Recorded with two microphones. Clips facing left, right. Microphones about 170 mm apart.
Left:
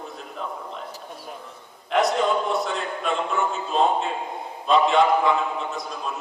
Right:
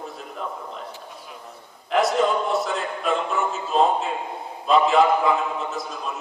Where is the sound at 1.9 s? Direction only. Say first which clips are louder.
Right 1 dB; centre (ahead or behind).